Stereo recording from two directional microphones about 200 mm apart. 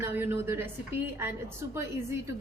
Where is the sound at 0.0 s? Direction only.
10° right (ahead or behind).